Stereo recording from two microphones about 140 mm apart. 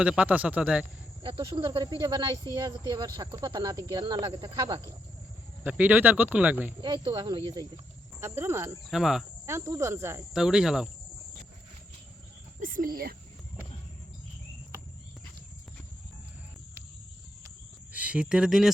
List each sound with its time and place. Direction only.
0.0 s speech: 10° right (ahead or behind)
1.2 s speech: 35° right (ahead or behind)
5.6 s speech: 10° right (ahead or behind)
6.8 s speech: 35° right (ahead or behind)
8.2 s speech: 20° right (ahead or behind)
8.9 s insect: 5° right (ahead or behind)
9.5 s speech: 20° right (ahead or behind)
10.3 s insect: 5° right (ahead or behind)
12.5 s speech: 75° right (ahead or behind); by 13.1 s 90° right
17.9 s speech: 10° right (ahead or behind)